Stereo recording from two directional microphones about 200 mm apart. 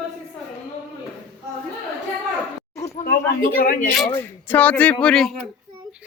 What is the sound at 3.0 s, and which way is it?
Speech, 45° left (ahead or behind).